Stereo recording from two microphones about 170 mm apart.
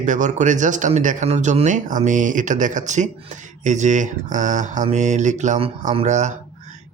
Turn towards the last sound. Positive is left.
turn(degrees=-45)  # may be behind; listen again after turning